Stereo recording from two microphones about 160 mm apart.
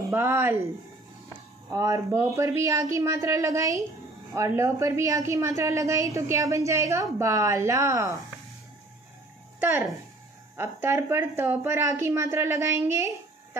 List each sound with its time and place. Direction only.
0.1 s a woman's voice: 15° right (ahead or behind)
9.6 s speech: 10° right (ahead or behind)